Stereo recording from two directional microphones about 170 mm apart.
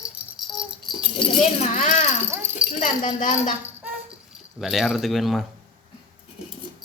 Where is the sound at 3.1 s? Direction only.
45° left (ahead or behind).